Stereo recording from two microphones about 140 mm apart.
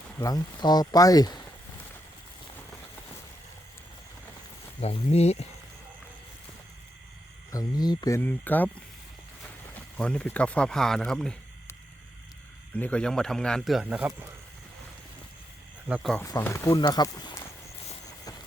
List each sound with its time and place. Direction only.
0.2 s speech: 25° left (ahead or behind)
4.8 s speech: 50° left (ahead or behind)
7.5 s speech: 25° left (ahead or behind)
8.2 s speech: 10° left (ahead or behind)
10.0 s speech: 10° left (ahead or behind)
12.7 s speech: 10° left (ahead or behind); by 14.3 s 10° right (ahead or behind)
16.2 s speech: 20° left (ahead or behind)